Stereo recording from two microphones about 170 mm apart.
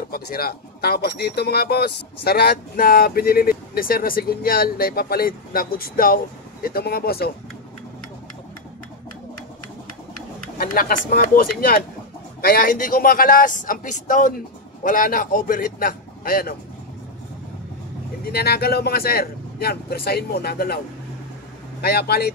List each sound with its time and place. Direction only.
0.1 s speech: 60° left (ahead or behind)
10.6 s speech: 55° left (ahead or behind)
18.2 s speech: 70° left (ahead or behind)
21.8 s speech: 70° left (ahead or behind)